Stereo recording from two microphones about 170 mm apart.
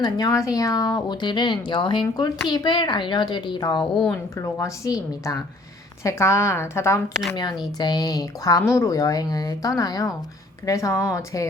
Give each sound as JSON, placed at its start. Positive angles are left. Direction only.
{"t": 0.0, "sound": "speech", "side_deg": 20}
{"t": 3.8, "sound": "a woman's voice", "side_deg": 5}
{"t": 4.4, "sound": "a woman's voice", "side_deg": 20}